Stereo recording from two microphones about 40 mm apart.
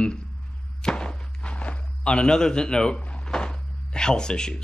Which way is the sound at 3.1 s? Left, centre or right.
Left.